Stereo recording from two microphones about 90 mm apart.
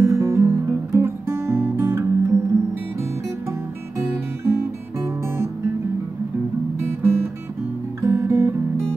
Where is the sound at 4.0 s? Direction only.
35° right (ahead or behind).